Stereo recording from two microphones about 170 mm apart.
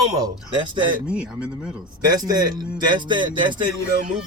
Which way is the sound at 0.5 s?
25° right (ahead or behind).